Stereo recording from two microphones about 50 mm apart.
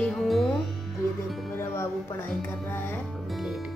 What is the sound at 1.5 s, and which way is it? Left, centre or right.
Speech, left.